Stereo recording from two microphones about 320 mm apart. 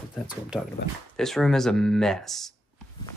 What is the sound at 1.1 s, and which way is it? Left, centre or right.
Speech, centre.